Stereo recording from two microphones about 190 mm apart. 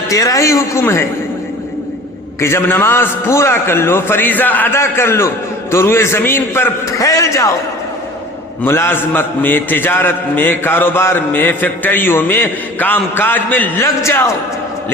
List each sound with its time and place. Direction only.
0.1 s a man's voice: 15° left (ahead or behind)
2.4 s a man's voice: 15° left (ahead or behind)
8.6 s a man's voice: 10° left (ahead or behind)